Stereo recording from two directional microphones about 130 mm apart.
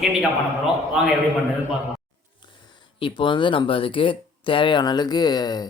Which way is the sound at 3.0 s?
40° left (ahead or behind).